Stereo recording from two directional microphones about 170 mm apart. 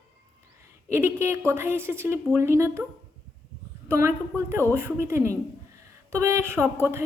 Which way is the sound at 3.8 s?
15° right (ahead or behind).